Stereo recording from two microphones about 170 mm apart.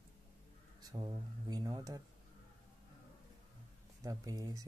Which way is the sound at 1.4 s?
25° right (ahead or behind).